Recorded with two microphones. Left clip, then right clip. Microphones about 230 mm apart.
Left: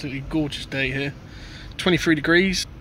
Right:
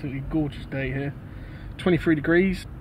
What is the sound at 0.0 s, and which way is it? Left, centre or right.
Speech, centre.